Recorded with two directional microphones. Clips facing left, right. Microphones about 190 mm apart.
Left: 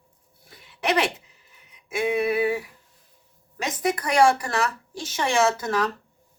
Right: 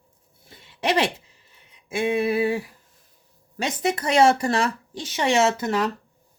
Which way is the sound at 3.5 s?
30° right (ahead or behind).